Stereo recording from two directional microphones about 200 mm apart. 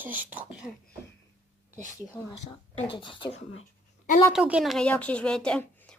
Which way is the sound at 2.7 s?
25° left (ahead or behind).